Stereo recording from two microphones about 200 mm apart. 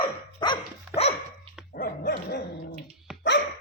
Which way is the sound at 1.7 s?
50° left (ahead or behind).